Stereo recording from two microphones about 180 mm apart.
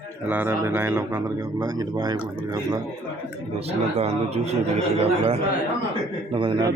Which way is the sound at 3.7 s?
35° right (ahead or behind).